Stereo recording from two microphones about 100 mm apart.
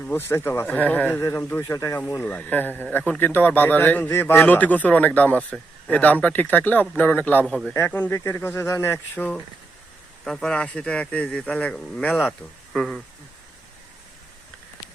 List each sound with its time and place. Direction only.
0.1 s speech: 25° left (ahead or behind)
1.7 s speech: 35° left (ahead or behind)
2.0 s a man's voice: 20° left (ahead or behind)
10.2 s a man's voice: 5° left (ahead or behind)